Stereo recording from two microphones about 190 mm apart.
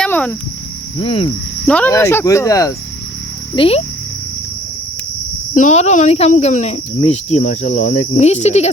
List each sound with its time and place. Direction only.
0.0 s cricket: 5° left (ahead or behind)
0.9 s speech: 25° left (ahead or behind)
1.6 s speech: 5° left (ahead or behind)
3.5 s speech: 30° left (ahead or behind)
5.5 s speech: 35° left (ahead or behind)